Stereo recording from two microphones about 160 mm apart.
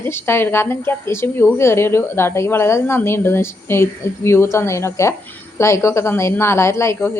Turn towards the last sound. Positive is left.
turn(degrees=15)  # may be behind; listen again after turning